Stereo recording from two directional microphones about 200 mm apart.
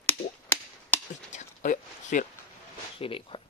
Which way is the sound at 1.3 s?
40° left (ahead or behind).